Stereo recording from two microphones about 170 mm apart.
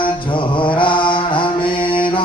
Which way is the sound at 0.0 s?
30° left (ahead or behind).